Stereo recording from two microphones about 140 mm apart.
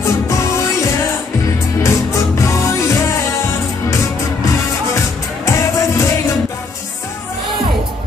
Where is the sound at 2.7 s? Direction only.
20° left (ahead or behind).